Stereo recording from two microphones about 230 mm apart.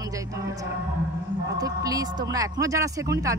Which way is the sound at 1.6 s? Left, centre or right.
Centre.